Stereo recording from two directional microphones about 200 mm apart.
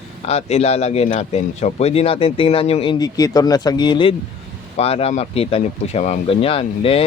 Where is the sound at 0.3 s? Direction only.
30° left (ahead or behind).